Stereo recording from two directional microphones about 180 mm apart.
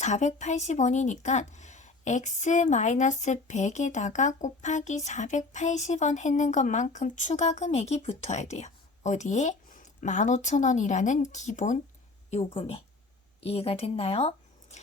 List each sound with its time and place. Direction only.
0.0 s a woman's voice: 40° left (ahead or behind)
12.3 s a woman's voice: 35° left (ahead or behind)